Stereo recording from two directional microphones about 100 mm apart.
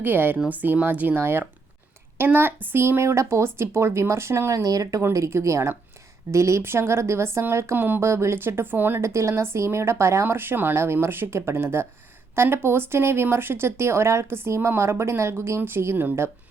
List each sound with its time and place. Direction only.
0.0 s a woman's voice: 20° right (ahead or behind)